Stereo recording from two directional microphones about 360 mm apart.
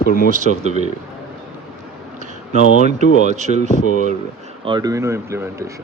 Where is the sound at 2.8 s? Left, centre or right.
Centre.